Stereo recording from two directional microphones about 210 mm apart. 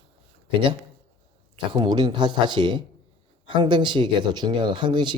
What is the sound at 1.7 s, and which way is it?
Speech, 20° right (ahead or behind).